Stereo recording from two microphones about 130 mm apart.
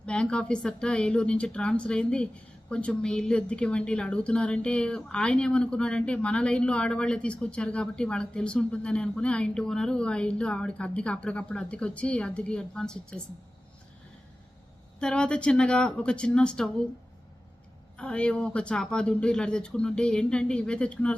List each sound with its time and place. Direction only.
0.0 s speech: 10° left (ahead or behind)
14.9 s speech: 5° left (ahead or behind)
17.9 s speech: 10° left (ahead or behind)